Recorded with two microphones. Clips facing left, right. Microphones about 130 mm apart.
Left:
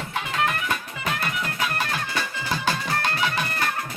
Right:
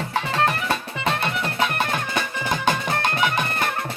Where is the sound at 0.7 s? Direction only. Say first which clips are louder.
Right 4 dB; 25° right (ahead or behind).